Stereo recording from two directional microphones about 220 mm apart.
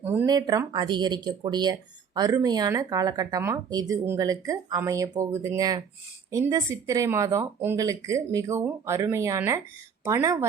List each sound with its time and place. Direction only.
0.0 s speech: 10° right (ahead or behind)